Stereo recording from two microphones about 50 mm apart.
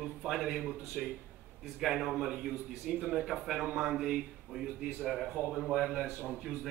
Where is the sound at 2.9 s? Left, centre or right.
Centre.